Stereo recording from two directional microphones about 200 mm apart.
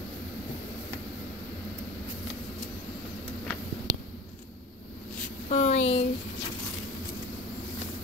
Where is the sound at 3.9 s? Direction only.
40° right (ahead or behind).